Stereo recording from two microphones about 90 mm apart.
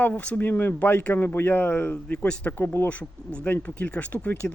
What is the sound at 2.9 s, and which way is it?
Speech, 15° left (ahead or behind).